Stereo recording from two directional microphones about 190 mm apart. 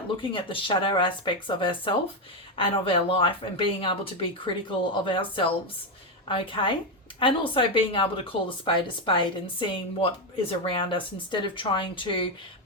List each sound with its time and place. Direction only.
0.2 s speech: 25° left (ahead or behind)